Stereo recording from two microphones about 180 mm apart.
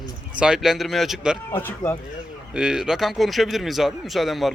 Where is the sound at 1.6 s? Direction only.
15° left (ahead or behind).